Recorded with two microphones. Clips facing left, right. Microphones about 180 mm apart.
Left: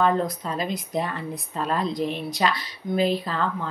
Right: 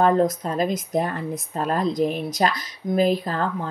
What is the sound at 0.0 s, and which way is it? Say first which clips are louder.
A woman's voice: right 4 dB; 45° right (ahead or behind).